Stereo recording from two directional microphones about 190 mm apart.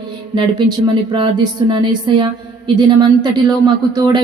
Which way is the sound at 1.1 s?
25° right (ahead or behind).